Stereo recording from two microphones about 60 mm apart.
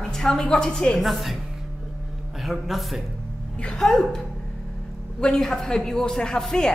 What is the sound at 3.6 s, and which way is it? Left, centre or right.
A man's voice, centre.